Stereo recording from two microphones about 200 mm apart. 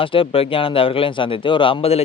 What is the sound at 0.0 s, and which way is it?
Speech, 25° left (ahead or behind).